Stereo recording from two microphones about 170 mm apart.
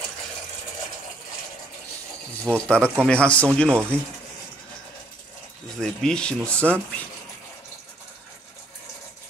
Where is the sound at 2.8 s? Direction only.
10° right (ahead or behind).